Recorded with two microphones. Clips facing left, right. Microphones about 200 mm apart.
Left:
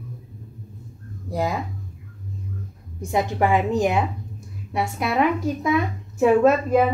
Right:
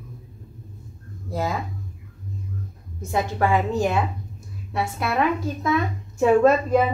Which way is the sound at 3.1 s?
15° left (ahead or behind).